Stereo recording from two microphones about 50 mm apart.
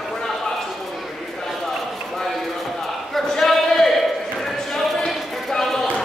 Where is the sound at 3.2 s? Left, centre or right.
Centre.